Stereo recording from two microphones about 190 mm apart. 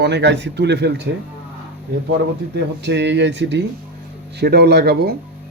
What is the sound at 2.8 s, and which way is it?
Speech, 65° right (ahead or behind).